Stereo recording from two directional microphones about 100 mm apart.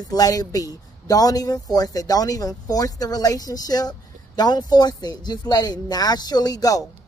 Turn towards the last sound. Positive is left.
turn(degrees=40)  # may be behind; listen again after turning